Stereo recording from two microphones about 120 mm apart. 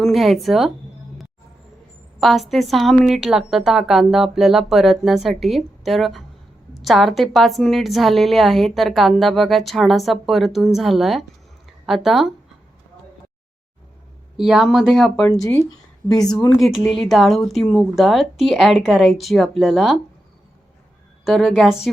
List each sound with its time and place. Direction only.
0.0 s speech: centre (ahead or behind)
2.2 s a woman's voice: centre (ahead or behind)
14.3 s a woman's voice: 5° right (ahead or behind)
15.3 s speech: 30° left (ahead or behind)
16.0 s a woman's voice: 40° left (ahead or behind)
16.6 s a woman's voice: centre (ahead or behind)
21.2 s a woman's voice: centre (ahead or behind)